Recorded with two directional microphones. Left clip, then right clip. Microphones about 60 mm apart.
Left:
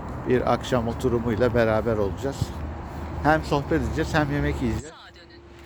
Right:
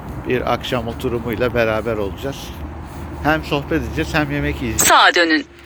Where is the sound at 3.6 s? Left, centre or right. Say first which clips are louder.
Right 4 dB; left.